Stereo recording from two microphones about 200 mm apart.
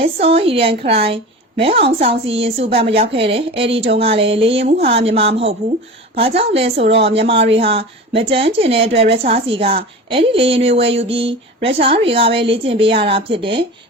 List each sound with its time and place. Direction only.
0.0 s a woman's voice: 30° right (ahead or behind)